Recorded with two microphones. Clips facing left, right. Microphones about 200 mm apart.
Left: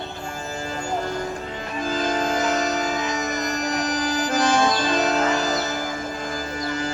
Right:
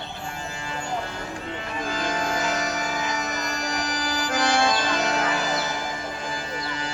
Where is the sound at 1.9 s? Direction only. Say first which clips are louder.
Left 5 dB; 35° left (ahead or behind).